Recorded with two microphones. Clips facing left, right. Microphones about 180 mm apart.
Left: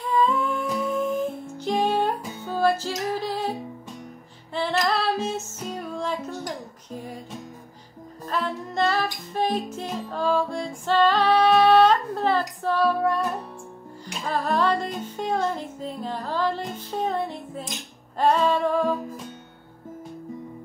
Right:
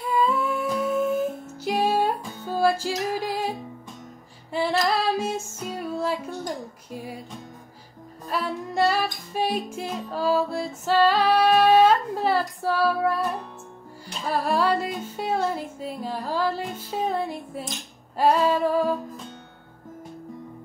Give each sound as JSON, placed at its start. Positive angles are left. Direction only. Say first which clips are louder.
{"t": 0.0, "sound": "humming", "louder": "left 1 dB", "side_deg": -10}
{"t": 1.6, "sound": "music", "louder": "even", "side_deg": -10}
{"t": 4.6, "sound": "music", "louder": "right 1 dB", "side_deg": -10}
{"t": 8.3, "sound": "music", "louder": "even", "side_deg": -10}
{"t": 10.1, "sound": "female singing", "louder": "right 1 dB", "side_deg": -5}
{"t": 14.2, "sound": "music", "louder": "even", "side_deg": -10}